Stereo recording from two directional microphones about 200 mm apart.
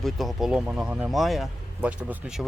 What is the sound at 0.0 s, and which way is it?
Speech, centre (ahead or behind).